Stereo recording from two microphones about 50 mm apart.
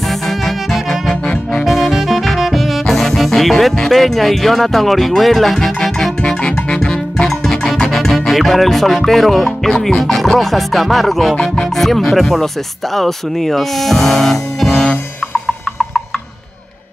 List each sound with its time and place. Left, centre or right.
0.1 s music: centre
1.2 s music: left
1.6 s music: centre
3.9 s speech: centre
6.7 s music: centre
12.9 s speech: centre
15.4 s music: centre